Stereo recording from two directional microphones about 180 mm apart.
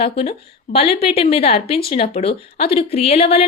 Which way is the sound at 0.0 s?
30° left (ahead or behind).